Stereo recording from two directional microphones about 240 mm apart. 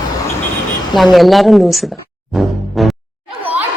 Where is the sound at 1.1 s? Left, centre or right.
Centre.